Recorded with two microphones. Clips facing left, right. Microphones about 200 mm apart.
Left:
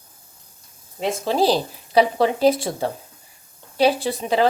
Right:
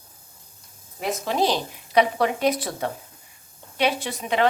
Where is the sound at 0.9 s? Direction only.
30° left (ahead or behind).